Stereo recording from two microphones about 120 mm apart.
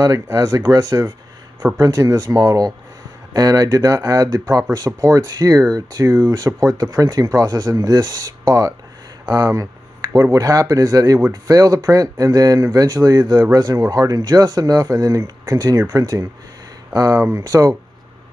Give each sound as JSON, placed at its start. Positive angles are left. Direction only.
{"t": 0.0, "sound": "speech", "side_deg": -30}